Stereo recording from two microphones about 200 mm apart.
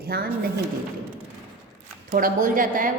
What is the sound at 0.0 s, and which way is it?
Speech, 50° right (ahead or behind).